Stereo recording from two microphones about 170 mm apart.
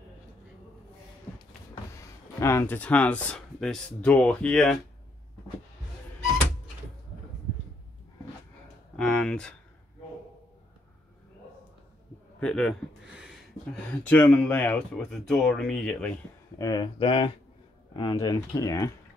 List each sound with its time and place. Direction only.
2.4 s speech: 15° left (ahead or behind)
8.9 s a sound: 5° left (ahead or behind)
12.4 s speech: 5° left (ahead or behind)
14.0 s speech: 10° left (ahead or behind)
16.5 s speech: 25° left (ahead or behind)